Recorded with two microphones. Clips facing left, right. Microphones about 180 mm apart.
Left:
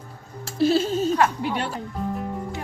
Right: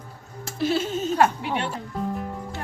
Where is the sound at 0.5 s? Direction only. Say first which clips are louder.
Left 4 dB; 30° left (ahead or behind).